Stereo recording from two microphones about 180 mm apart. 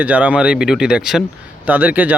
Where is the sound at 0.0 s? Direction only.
10° right (ahead or behind).